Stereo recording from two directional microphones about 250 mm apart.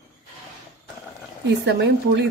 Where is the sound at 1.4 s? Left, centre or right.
Right.